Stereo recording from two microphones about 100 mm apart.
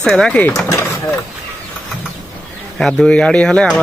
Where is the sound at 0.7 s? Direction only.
25° left (ahead or behind).